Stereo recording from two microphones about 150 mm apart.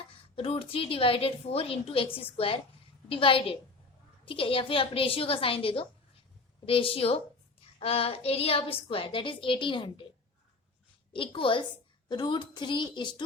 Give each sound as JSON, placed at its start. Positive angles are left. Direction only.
{"t": 0.3, "sound": "a woman's voice", "side_deg": 40}
{"t": 11.1, "sound": "a woman's voice", "side_deg": 35}